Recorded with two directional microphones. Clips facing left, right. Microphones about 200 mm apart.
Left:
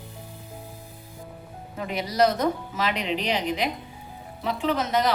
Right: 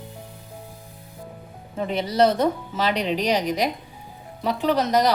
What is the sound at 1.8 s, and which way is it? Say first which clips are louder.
Speech: right 3 dB; 30° right (ahead or behind).